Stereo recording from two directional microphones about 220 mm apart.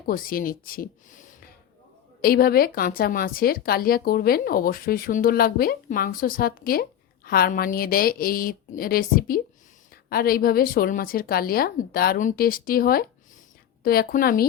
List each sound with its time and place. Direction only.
0.1 s a woman's voice: 40° left (ahead or behind)
2.2 s a woman's voice: 40° left (ahead or behind)